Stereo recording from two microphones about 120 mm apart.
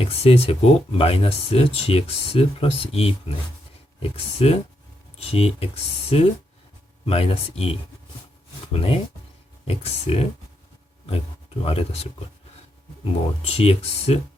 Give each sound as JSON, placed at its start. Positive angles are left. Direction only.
{"t": 0.0, "sound": "speech", "side_deg": 55}
{"t": 13.4, "sound": "speech", "side_deg": 60}